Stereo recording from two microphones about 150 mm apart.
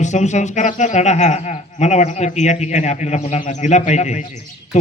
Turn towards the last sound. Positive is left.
turn(degrees=50)  # may be behind; listen again after turning